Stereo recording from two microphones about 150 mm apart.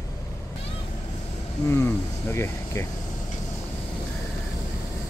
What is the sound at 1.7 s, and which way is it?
Speech, 15° left (ahead or behind).